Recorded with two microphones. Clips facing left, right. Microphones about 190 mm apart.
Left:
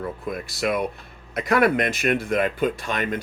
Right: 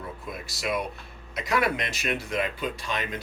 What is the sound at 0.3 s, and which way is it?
Speech, 55° left (ahead or behind).